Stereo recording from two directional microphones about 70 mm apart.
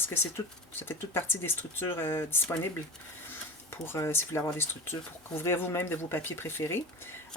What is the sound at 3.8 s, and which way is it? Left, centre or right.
Speech, left.